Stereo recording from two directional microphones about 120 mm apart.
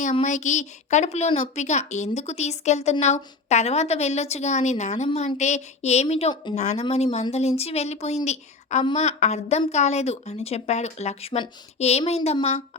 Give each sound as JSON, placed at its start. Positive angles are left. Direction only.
{"t": 0.0, "sound": "a woman's voice", "side_deg": 80}
{"t": 5.0, "sound": "a woman's voice", "side_deg": 65}